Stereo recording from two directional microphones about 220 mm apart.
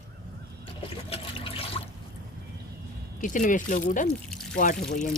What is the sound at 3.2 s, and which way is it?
Speech, 35° left (ahead or behind).